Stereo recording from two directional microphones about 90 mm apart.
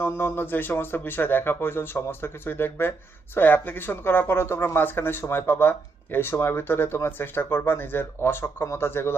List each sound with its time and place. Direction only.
0.0 s speech: 25° left (ahead or behind)